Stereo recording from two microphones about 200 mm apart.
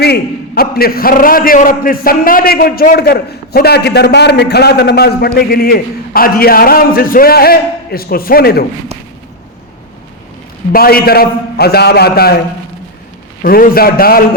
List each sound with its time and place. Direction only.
0.0 s a man's voice: 50° left (ahead or behind)
10.7 s a man's voice: 50° left (ahead or behind)
13.4 s a man's voice: 45° left (ahead or behind)